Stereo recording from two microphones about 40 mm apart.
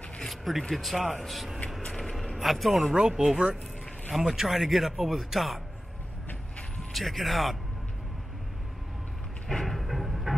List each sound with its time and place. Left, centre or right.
0.2 s speech: centre
1.9 s a sound: centre
2.3 s a man's voice: centre
2.8 s speech: centre
6.9 s speech: centre
9.5 s music: centre